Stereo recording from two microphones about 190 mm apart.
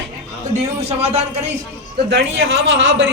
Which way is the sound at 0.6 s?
35° right (ahead or behind).